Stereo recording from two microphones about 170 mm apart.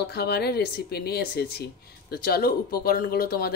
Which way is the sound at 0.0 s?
70° left (ahead or behind).